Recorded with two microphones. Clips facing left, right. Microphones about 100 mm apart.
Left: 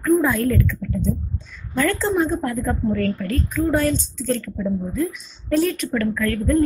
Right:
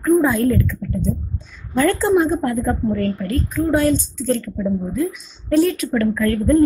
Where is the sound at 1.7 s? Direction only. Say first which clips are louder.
Right 5 dB; 15° right (ahead or behind).